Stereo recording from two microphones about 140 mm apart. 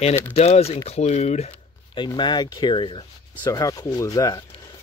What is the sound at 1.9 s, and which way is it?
Speech, 30° left (ahead or behind).